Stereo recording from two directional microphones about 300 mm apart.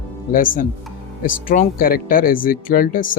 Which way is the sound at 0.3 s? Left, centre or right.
Left.